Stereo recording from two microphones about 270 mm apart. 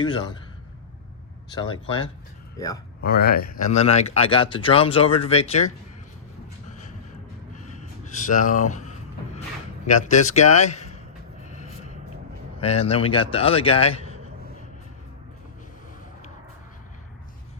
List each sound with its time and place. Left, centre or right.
0.0 s speech: centre
1.5 s speech: centre
3.0 s a man's voice: left
7.5 s a sound: left
9.8 s a man's voice: left
11.4 s a sound: left
12.5 s a man's voice: left